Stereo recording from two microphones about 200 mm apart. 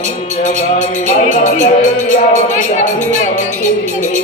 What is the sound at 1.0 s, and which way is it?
Music, 35° left (ahead or behind).